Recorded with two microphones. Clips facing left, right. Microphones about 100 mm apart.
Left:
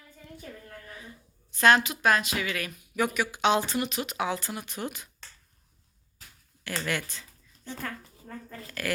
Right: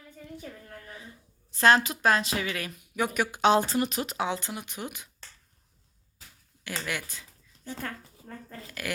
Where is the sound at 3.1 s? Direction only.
45° right (ahead or behind).